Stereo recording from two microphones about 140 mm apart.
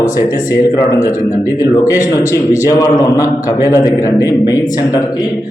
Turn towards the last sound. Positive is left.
turn(degrees=30)  # may be behind; listen again after turning